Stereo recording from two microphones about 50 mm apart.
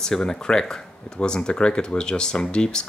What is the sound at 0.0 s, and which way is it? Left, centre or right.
Speech, centre.